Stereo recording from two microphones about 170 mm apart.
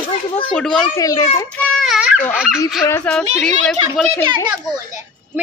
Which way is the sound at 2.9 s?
15° left (ahead or behind).